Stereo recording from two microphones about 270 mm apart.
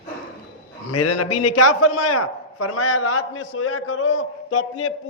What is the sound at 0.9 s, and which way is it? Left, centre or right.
A man's voice, left.